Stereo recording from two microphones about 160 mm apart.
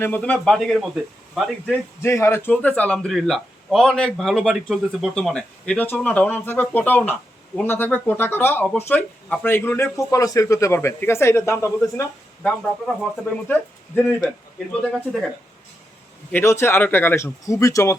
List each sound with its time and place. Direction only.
0.0 s speech: 10° left (ahead or behind)
1.6 s speech: 10° left (ahead or behind)
12.4 s speech: 5° left (ahead or behind)
14.9 s speech: centre (ahead or behind)
16.3 s speech: 15° left (ahead or behind)